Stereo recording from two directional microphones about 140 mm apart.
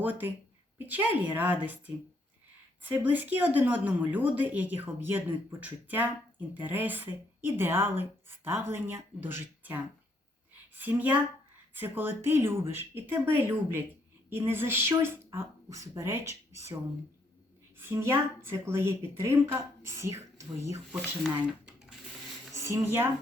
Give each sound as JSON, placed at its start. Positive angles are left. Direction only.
{"t": 0.0, "sound": "a woman's voice", "side_deg": -15}
{"t": 2.8, "sound": "a woman's voice", "side_deg": -15}
{"t": 17.7, "sound": "a woman's voice", "side_deg": -15}
{"t": 20.9, "sound": "speech", "side_deg": -5}
{"t": 22.5, "sound": "speech", "side_deg": -20}